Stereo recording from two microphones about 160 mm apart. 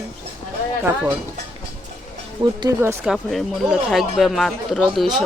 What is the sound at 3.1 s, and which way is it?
Speech, centre (ahead or behind).